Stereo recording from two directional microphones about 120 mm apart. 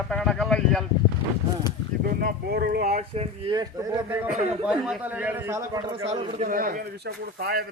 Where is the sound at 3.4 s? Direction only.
35° right (ahead or behind).